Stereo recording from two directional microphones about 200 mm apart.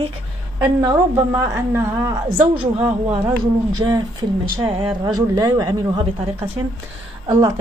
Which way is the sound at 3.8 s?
20° right (ahead or behind).